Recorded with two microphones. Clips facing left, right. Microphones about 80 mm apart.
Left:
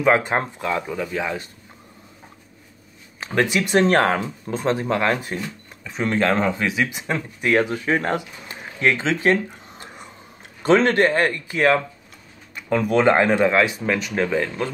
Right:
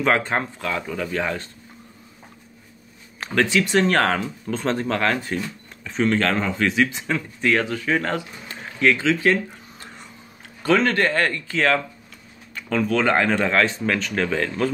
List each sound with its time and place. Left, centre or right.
0.0 s a man's voice: centre
1.0 s speech: centre
3.3 s a man's voice: centre
4.6 s a man's voice: centre